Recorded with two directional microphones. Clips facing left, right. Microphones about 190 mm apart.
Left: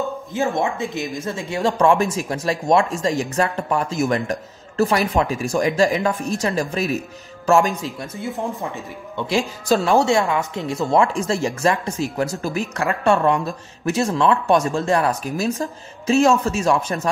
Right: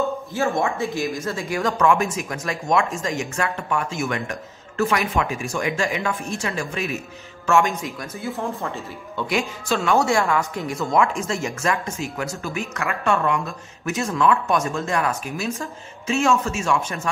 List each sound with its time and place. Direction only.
0.3 s speech: 20° left (ahead or behind)
8.4 s speech: 15° left (ahead or behind)
9.3 s speech: 35° left (ahead or behind)